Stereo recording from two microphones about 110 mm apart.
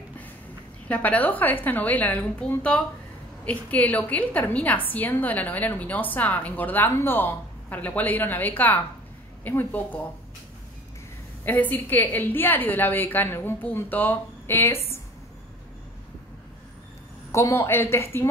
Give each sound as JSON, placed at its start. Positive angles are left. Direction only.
{"t": 0.8, "sound": "a woman's voice", "side_deg": 15}
{"t": 11.4, "sound": "a woman's voice", "side_deg": 15}
{"t": 17.3, "sound": "speech", "side_deg": 25}